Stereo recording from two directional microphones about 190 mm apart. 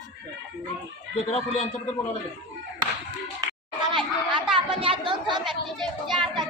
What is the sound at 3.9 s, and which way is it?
Speech, 25° right (ahead or behind).